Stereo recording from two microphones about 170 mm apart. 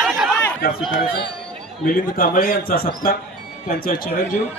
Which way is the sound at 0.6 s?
60° left (ahead or behind).